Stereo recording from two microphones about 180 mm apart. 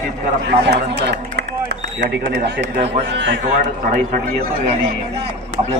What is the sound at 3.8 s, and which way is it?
A man's voice, 50° right (ahead or behind).